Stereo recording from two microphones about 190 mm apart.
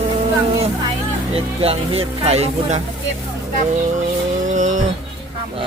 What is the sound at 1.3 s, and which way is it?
Speech, 30° right (ahead or behind).